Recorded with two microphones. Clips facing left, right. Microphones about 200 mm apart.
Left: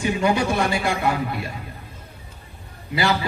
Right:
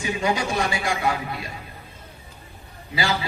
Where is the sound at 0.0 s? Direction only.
55° left (ahead or behind).